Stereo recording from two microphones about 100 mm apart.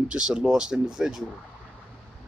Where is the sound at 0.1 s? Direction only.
10° right (ahead or behind).